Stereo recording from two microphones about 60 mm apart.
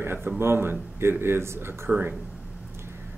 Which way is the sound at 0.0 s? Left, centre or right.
Right.